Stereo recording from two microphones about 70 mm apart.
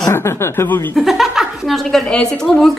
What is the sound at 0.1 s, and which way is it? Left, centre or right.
Speech, left.